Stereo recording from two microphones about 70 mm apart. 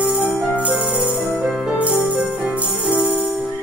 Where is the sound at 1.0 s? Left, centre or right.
Centre.